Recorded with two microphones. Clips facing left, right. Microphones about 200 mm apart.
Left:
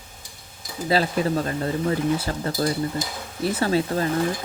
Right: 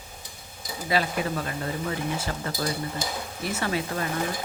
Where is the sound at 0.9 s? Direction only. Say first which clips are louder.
Left 5 dB; 35° left (ahead or behind).